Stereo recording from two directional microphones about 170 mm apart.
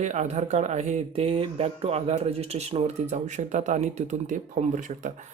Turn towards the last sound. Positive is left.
turn(degrees=-45)  # may be behind; listen again after turning